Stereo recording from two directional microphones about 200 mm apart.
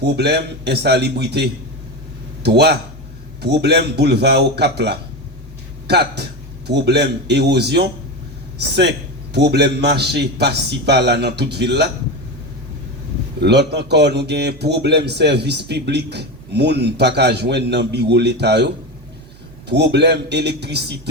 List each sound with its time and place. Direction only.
0.0 s a man's voice: 55° right (ahead or behind)
13.4 s a man's voice: 55° right (ahead or behind)